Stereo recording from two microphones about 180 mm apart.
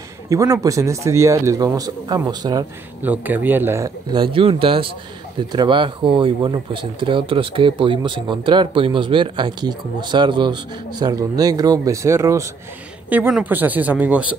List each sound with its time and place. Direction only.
0.3 s speech: 20° right (ahead or behind)
3.0 s speech: 10° right (ahead or behind)